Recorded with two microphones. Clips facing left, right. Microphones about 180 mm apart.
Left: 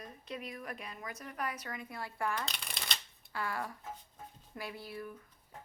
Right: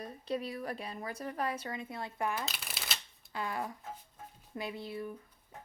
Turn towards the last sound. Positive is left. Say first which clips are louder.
# right 4 dB
turn(degrees=-25)  # may be behind; listen again after turning